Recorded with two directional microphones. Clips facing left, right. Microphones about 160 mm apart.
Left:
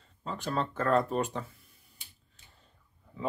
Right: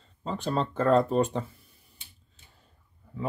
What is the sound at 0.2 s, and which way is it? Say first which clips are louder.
Speech: right 4 dB; 30° right (ahead or behind).